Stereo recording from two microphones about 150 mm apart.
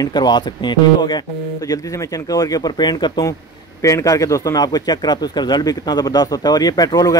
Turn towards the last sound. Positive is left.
turn(degrees=25)  # may be behind; listen again after turning